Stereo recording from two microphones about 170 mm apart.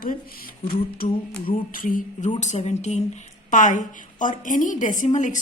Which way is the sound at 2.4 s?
40° left (ahead or behind).